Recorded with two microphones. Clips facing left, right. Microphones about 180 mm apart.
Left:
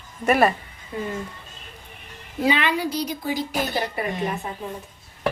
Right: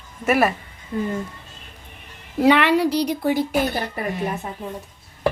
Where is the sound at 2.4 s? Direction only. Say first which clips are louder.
Right 6 dB; 65° right (ahead or behind).